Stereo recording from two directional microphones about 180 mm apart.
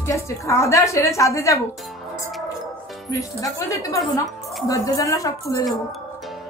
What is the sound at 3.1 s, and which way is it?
A woman's voice, 20° left (ahead or behind).